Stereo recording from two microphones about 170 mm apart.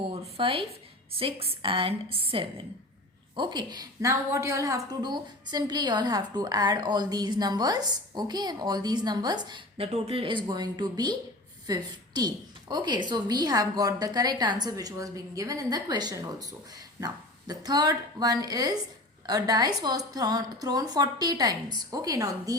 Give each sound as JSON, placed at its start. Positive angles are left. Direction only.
{"t": 0.0, "sound": "a woman's voice", "side_deg": -30}